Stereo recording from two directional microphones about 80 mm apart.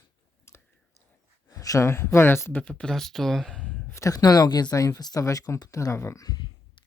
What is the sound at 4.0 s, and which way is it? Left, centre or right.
Speech, left.